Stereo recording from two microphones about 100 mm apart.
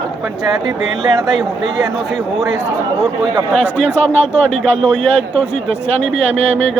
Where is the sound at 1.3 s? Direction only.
Centre (ahead or behind).